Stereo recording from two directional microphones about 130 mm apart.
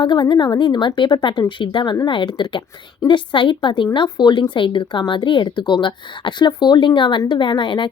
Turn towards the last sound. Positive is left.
turn(degrees=35)  # may be behind; listen again after turning